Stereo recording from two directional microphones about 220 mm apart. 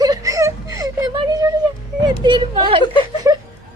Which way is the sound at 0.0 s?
15° right (ahead or behind).